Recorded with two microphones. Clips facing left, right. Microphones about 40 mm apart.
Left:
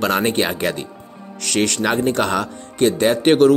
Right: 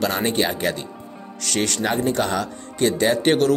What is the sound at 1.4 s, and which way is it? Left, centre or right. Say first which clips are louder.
Speech: left 4 dB; left.